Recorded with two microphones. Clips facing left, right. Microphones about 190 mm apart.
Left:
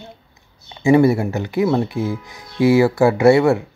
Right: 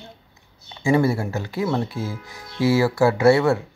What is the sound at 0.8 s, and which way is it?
Speech, 20° left (ahead or behind).